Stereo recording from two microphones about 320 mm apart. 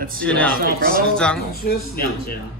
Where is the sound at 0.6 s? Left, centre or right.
Right.